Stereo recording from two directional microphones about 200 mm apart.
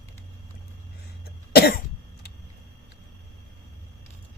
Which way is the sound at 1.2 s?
55° left (ahead or behind).